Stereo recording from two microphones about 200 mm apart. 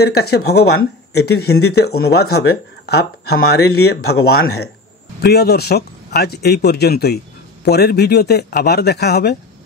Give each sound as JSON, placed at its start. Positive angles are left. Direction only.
{"t": 0.0, "sound": "speech", "side_deg": 55}